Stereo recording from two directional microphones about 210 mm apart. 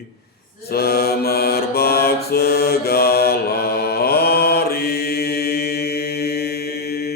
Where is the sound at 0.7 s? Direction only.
50° left (ahead or behind).